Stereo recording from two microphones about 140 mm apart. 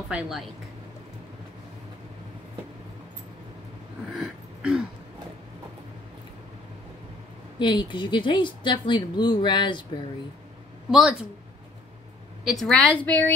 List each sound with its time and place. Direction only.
0.1 s a woman's voice: 5° right (ahead or behind)
4.1 s throat clearing: 5° right (ahead or behind)
7.5 s speech: 35° left (ahead or behind)
10.9 s speech: 5° right (ahead or behind)
12.4 s a woman's voice: 5° left (ahead or behind)